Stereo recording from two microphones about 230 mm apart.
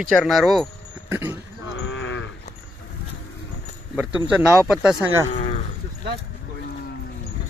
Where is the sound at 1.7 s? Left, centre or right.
Left.